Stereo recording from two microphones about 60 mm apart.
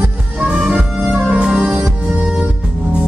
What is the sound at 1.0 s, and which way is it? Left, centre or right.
Music, right.